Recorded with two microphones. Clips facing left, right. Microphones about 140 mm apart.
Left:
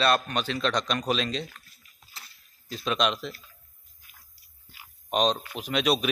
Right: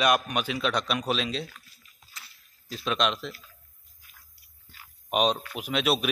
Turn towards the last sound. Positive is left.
turn(degrees=-5)  # may be behind; listen again after turning